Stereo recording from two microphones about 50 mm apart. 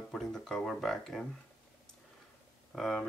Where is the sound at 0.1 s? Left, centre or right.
Centre.